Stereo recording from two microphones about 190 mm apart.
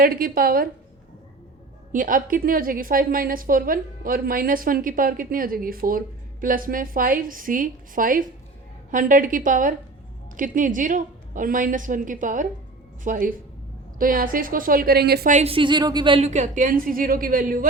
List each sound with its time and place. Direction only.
0.0 s a woman's voice: 50° right (ahead or behind)
1.9 s a woman's voice: 45° right (ahead or behind)
15.3 s a woman's voice: 35° right (ahead or behind)